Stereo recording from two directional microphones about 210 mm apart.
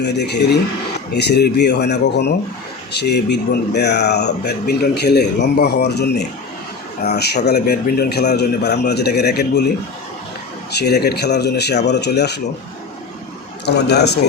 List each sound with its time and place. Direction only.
0.0 s speech: 55° left (ahead or behind)
10.7 s speech: 50° left (ahead or behind)
13.7 s speech: 50° left (ahead or behind)